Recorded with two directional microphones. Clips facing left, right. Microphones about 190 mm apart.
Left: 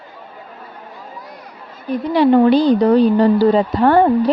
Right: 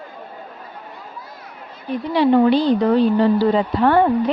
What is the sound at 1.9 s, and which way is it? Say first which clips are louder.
A woman's voice: left 3 dB; 45° left (ahead or behind).